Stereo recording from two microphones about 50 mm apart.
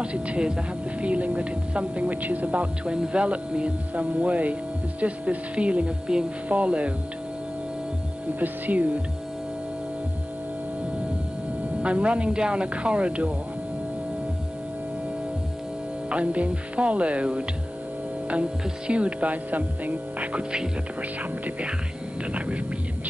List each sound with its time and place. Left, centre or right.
0.0 s speech: right
8.4 s speech: right
11.8 s speech: right
16.1 s speech: right